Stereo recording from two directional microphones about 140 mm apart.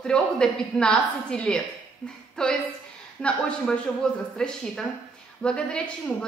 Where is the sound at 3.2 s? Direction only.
10° left (ahead or behind).